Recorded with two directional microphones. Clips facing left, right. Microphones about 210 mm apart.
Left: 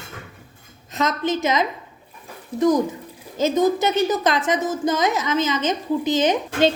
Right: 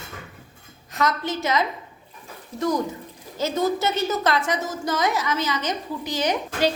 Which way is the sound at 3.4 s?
15° left (ahead or behind).